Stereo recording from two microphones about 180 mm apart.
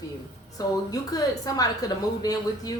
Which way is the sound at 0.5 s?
20° left (ahead or behind).